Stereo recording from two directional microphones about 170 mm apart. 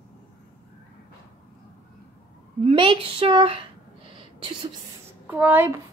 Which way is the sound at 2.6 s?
30° right (ahead or behind).